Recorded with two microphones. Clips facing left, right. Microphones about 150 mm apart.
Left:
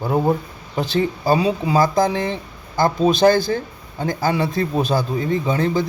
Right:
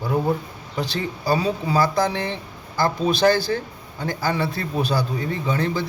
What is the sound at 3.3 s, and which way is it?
Speech, 45° left (ahead or behind).